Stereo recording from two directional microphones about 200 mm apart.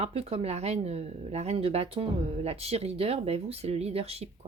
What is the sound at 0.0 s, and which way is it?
Speech, 30° right (ahead or behind).